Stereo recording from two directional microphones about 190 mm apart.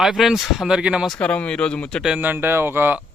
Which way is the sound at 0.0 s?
Centre (ahead or behind).